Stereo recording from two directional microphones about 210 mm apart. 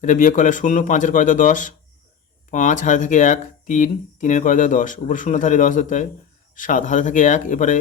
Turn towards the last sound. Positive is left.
turn(degrees=35)  # may be behind; listen again after turning